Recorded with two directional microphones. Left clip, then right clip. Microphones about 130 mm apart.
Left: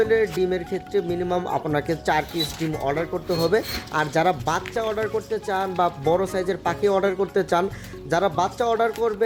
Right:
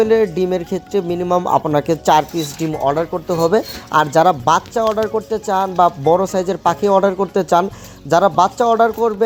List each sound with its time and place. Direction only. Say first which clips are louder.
0.0 s speech: right 6 dB; 45° right (ahead or behind)